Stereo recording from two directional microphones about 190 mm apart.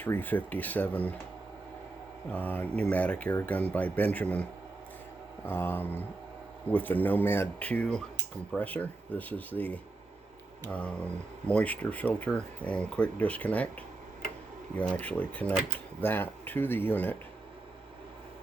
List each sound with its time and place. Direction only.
0.0 s speech: 10° left (ahead or behind)
2.3 s speech: 10° left (ahead or behind)
14.8 s speech: 5° left (ahead or behind)